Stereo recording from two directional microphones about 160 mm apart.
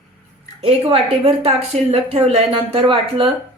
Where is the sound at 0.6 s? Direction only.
35° right (ahead or behind).